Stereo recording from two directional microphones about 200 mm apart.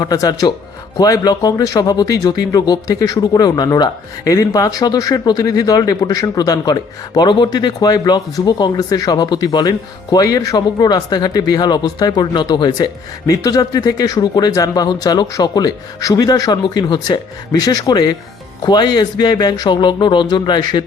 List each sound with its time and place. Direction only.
0.0 s speech: 20° left (ahead or behind)